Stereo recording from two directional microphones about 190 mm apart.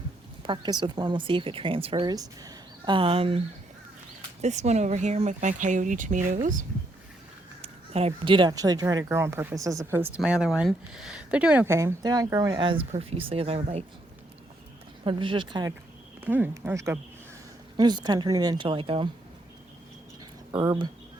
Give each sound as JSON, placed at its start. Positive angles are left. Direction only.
{"t": 0.4, "sound": "speech", "side_deg": -25}
{"t": 7.6, "sound": "speech", "side_deg": -30}
{"t": 15.0, "sound": "speech", "side_deg": -25}
{"t": 16.2, "sound": "speech", "side_deg": -10}
{"t": 20.5, "sound": "speech", "side_deg": -20}